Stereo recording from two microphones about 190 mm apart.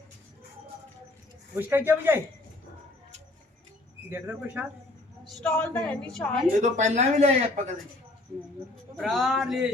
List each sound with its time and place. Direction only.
1.5 s speech: 10° right (ahead or behind)
4.1 s speech: 10° right (ahead or behind)
5.4 s a woman's voice: 10° left (ahead or behind)
6.6 s speech: 40° right (ahead or behind)
9.0 s speech: centre (ahead or behind)